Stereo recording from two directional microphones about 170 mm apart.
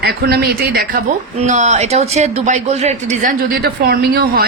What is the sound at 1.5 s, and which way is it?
Speech, 45° right (ahead or behind).